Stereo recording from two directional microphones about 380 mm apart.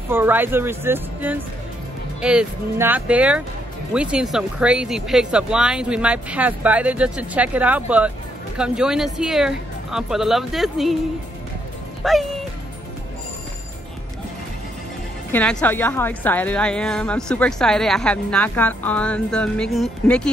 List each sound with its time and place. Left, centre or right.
0.1 s a woman's voice: centre
12.0 s speech: centre
15.3 s a woman's voice: centre